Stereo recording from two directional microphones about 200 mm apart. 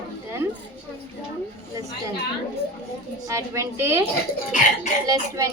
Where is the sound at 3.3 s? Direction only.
15° right (ahead or behind).